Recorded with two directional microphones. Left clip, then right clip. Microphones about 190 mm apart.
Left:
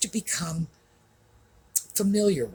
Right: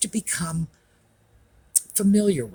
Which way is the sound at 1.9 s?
50° right (ahead or behind).